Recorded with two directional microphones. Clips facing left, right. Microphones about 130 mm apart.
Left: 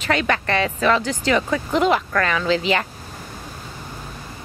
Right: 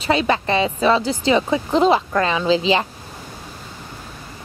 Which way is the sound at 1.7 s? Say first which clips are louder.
Right 3 dB; 30° right (ahead or behind).